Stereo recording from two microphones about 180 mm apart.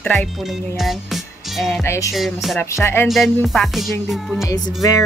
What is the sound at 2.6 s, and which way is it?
Music, 15° left (ahead or behind).